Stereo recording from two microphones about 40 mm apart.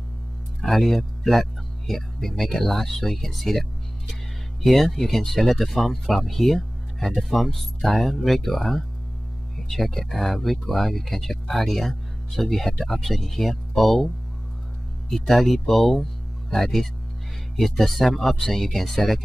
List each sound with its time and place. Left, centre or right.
0.6 s speech: centre
4.6 s speech: centre